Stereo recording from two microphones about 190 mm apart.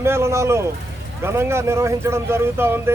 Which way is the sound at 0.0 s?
15° right (ahead or behind).